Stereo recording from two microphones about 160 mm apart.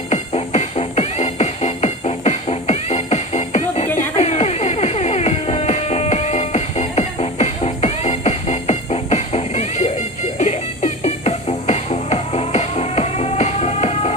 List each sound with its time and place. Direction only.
0.1 s music: 45° left (ahead or behind)